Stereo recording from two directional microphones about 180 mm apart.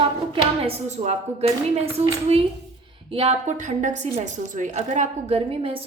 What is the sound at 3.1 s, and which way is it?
A woman's voice, 35° right (ahead or behind).